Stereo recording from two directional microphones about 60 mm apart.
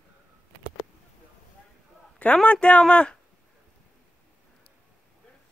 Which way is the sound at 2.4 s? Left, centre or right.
Left.